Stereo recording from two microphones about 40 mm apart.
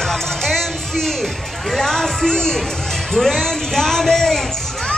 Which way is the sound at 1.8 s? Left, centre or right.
Centre.